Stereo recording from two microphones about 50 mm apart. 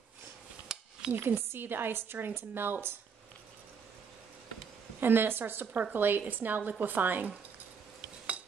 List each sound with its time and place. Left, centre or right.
0.7 s a sound: centre
1.1 s a woman's voice: right
5.0 s a woman's voice: right